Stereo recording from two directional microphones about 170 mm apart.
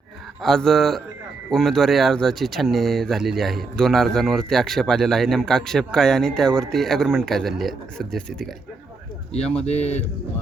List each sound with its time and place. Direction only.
0.4 s speech: centre (ahead or behind)
9.6 s speech: 40° left (ahead or behind)